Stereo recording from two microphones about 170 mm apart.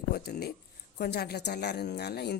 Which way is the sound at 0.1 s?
70° left (ahead or behind).